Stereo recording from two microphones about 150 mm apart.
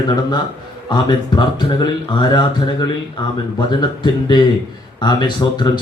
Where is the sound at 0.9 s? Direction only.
30° left (ahead or behind).